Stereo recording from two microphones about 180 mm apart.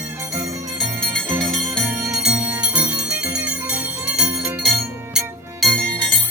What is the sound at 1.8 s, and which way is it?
Jingle bell, 10° right (ahead or behind).